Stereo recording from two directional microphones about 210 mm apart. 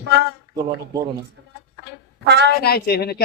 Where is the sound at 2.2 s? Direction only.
55° right (ahead or behind).